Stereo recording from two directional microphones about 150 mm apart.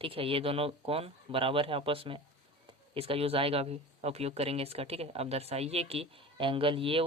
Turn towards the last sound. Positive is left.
turn(degrees=-40)  # may be behind; listen again after turning